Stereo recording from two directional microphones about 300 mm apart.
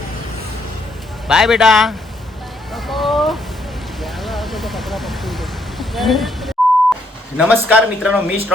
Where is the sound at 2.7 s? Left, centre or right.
Centre.